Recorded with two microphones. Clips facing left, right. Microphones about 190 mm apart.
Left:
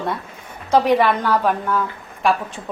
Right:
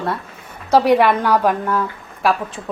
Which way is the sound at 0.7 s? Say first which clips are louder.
Right 2 dB; 10° right (ahead or behind).